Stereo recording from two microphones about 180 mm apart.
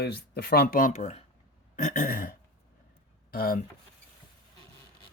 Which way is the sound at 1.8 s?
50° left (ahead or behind).